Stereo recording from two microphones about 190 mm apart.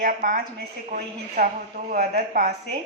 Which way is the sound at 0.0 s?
50° right (ahead or behind).